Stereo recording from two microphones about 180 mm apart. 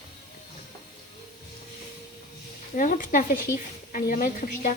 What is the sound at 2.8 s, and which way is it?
Speech, 45° left (ahead or behind).